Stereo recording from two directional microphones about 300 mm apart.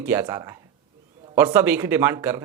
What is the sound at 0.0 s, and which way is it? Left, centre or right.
Speech, centre.